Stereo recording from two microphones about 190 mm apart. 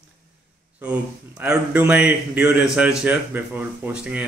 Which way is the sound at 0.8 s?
5° right (ahead or behind).